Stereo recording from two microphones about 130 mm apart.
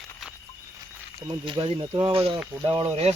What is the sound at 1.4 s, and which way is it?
Speech, 40° right (ahead or behind).